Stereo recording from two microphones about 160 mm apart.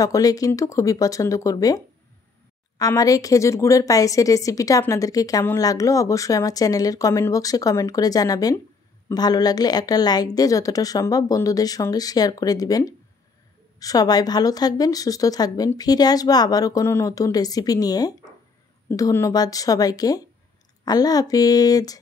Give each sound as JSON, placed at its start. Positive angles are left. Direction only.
{"t": 0.0, "sound": "a woman's voice", "side_deg": 20}
{"t": 2.8, "sound": "a woman's voice", "side_deg": 20}